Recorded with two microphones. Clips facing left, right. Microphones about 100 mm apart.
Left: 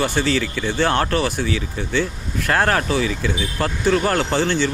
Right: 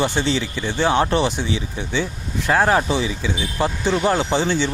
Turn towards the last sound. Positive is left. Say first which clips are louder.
# even
turn(degrees=-15)  # may be behind; listen again after turning